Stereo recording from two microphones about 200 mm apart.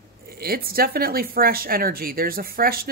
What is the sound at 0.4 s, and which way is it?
Speech, 50° right (ahead or behind).